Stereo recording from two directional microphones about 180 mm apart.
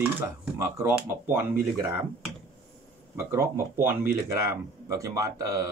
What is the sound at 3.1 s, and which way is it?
Speech, 15° right (ahead or behind).